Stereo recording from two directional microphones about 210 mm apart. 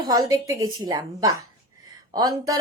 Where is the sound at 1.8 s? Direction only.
15° right (ahead or behind).